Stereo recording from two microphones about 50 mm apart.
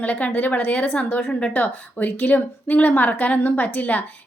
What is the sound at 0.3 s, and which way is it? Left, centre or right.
A woman's voice, left.